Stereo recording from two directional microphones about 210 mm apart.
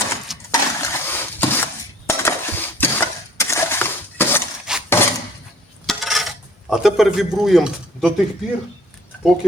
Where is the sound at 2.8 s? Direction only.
10° left (ahead or behind).